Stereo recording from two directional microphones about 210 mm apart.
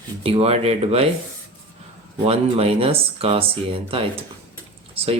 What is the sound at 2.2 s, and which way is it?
Speech, 25° right (ahead or behind).